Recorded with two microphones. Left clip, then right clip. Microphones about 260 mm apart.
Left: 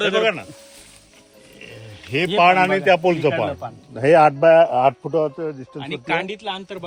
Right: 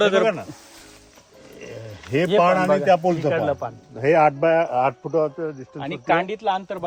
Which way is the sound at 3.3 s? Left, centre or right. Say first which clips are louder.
Even; right.